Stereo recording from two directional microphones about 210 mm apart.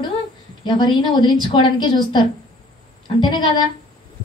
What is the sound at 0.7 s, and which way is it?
Speech, 20° left (ahead or behind).